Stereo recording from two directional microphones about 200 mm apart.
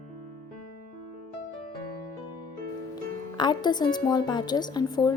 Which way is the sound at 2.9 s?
20° left (ahead or behind).